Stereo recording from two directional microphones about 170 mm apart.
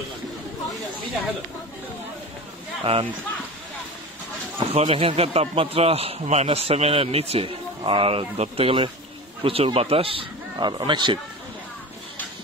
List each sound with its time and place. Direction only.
2.8 s a man's voice: 35° right (ahead or behind)
4.7 s a man's voice: 35° right (ahead or behind)